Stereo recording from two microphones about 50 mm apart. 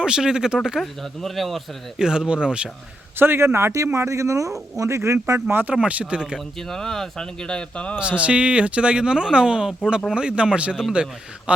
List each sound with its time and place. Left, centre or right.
0.0 s speech: centre
0.8 s speech: centre
2.0 s speech: centre
3.2 s speech: right
4.8 s speech: right
5.8 s speech: right
6.6 s speech: centre
7.9 s speech: right